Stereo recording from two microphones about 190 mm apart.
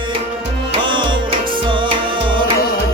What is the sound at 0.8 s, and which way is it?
Music, 25° right (ahead or behind).